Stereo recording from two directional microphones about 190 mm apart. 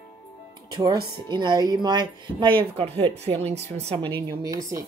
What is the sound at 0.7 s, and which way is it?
Speech, 20° right (ahead or behind).